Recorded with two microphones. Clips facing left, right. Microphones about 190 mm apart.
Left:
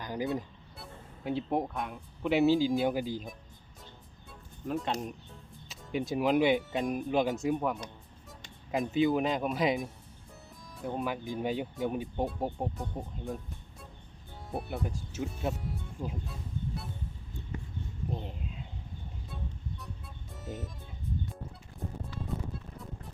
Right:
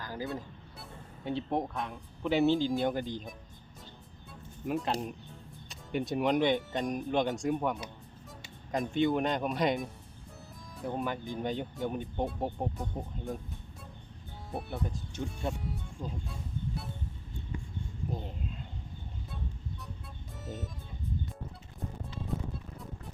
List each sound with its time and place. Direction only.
0.0 s vehicle: 20° left (ahead or behind)
0.8 s speech: 5° left (ahead or behind)
4.8 s speech: centre (ahead or behind)
14.5 s speech: 5° left (ahead or behind)
16.0 s toot: centre (ahead or behind)
18.1 s a sound: centre (ahead or behind)
20.4 s speech: centre (ahead or behind)